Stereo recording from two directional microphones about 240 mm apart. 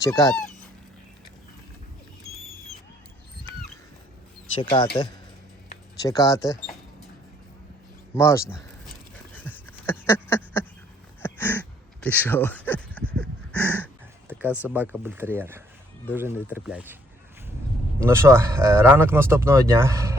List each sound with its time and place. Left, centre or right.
0.0 s speech: centre
4.5 s speech: centre
6.0 s speech: centre
8.1 s speech: centre
9.6 s a sound: centre
13.8 s speech: centre
18.0 s speech: centre